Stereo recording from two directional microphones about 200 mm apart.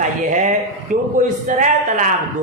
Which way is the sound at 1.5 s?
40° right (ahead or behind).